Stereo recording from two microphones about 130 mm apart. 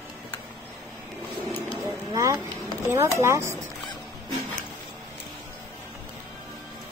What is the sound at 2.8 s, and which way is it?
Speech, 20° right (ahead or behind).